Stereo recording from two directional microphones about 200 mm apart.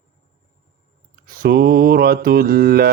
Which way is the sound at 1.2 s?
50° right (ahead or behind).